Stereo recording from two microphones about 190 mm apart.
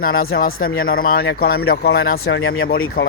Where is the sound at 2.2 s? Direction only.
90° left.